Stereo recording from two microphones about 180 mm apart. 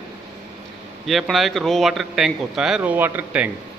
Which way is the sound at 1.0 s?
Centre (ahead or behind).